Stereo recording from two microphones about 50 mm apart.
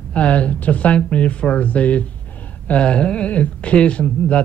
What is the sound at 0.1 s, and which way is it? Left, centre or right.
Speech, left.